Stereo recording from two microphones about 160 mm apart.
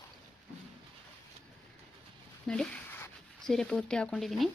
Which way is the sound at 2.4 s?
5° left (ahead or behind).